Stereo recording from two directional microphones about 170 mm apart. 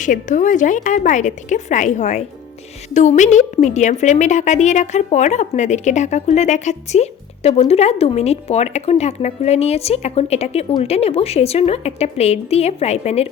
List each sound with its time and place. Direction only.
0.0 s a woman's voice: 50° left (ahead or behind)